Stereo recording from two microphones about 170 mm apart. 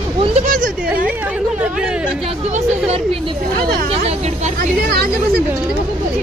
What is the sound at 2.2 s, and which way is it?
Speech, 35° right (ahead or behind).